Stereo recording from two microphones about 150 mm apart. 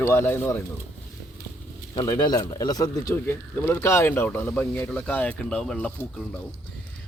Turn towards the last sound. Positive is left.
turn(degrees=10)  # may be behind; listen again after turning